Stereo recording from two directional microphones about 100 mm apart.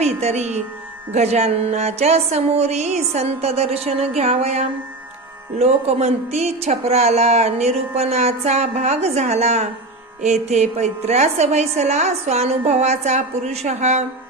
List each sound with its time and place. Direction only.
0.0 s speech: 90° right